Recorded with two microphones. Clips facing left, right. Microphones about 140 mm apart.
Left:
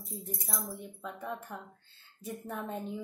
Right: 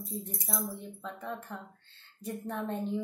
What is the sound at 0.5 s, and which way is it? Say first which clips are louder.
Speech: right 5 dB; 5° left (ahead or behind).